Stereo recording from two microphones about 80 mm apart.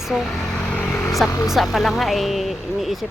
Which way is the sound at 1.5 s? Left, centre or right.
Centre.